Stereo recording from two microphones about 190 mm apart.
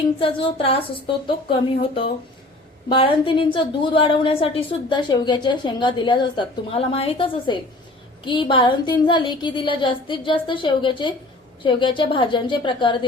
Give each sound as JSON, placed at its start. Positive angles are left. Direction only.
{"t": 0.2, "sound": "a woman's voice", "side_deg": 25}
{"t": 2.9, "sound": "a woman's voice", "side_deg": 25}